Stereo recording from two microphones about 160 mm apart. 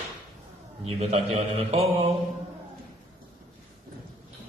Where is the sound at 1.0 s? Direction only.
40° right (ahead or behind).